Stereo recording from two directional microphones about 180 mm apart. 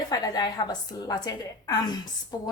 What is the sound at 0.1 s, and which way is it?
A woman's voice, 25° left (ahead or behind).